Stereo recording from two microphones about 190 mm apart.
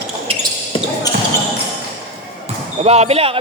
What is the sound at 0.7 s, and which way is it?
Basketball bounce, 25° left (ahead or behind).